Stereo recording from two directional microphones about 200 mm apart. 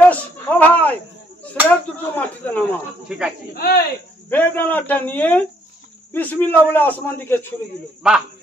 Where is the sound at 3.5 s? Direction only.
50° left (ahead or behind).